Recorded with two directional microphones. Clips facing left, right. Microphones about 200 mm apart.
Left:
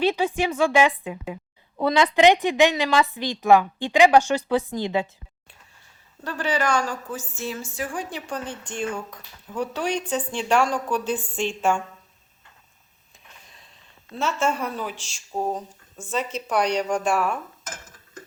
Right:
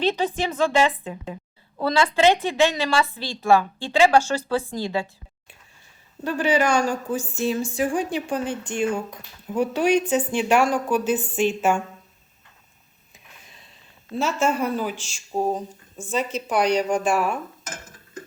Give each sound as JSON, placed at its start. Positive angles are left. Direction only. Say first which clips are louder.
{"t": 0.0, "sound": "a woman's voice", "louder": "left 1 dB", "side_deg": 10}
{"t": 6.2, "sound": "speech", "louder": "right 4 dB", "side_deg": -10}
{"t": 14.2, "sound": "speech", "louder": "right 2 dB", "side_deg": -5}